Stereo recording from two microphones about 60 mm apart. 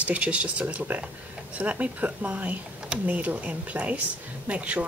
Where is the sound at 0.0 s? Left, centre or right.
Right.